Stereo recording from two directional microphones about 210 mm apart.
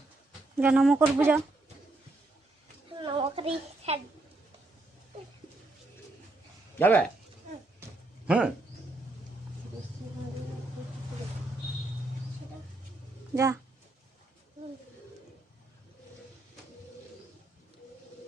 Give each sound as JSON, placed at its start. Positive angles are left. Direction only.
{"t": 0.5, "sound": "speech", "side_deg": -5}
{"t": 3.0, "sound": "a woman's voice", "side_deg": -25}
{"t": 6.7, "sound": "speech", "side_deg": 10}
{"t": 8.3, "sound": "speech", "side_deg": -5}
{"t": 13.3, "sound": "speech", "side_deg": -15}